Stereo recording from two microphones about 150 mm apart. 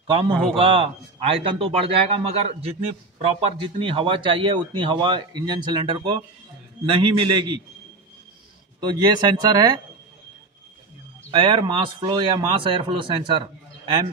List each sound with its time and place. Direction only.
0.0 s a man's voice: 35° right (ahead or behind)
8.8 s speech: 25° right (ahead or behind)
11.2 s a man's voice: 35° right (ahead or behind)